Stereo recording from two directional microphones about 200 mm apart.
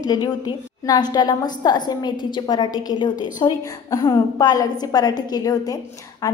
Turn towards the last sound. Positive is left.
turn(degrees=15)  # may be behind; listen again after turning